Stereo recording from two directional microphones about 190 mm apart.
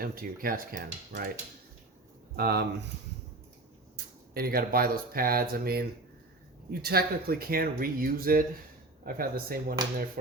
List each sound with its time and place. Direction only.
0.0 s speech: 50° right (ahead or behind)
2.3 s speech: 55° right (ahead or behind)
3.9 s speech: 55° right (ahead or behind)